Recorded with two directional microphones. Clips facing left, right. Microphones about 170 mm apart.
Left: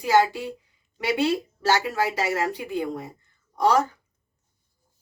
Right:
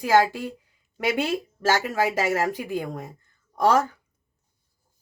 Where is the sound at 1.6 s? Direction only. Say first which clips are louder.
Right 1 dB; 50° right (ahead or behind).